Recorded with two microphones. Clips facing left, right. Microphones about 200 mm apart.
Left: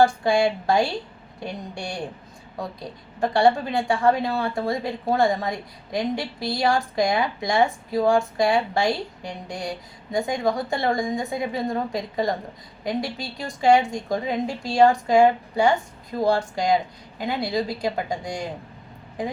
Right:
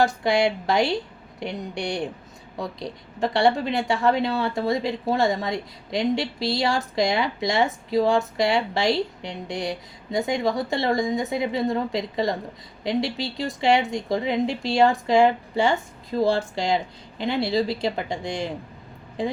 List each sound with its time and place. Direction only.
0.3 s speech: 20° right (ahead or behind)